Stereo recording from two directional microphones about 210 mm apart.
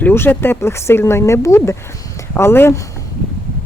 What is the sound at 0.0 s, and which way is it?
Speech, 10° left (ahead or behind).